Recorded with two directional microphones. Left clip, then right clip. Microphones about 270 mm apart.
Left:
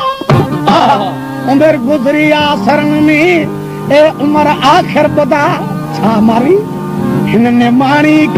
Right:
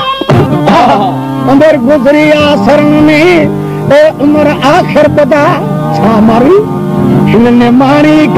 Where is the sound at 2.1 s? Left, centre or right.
Left.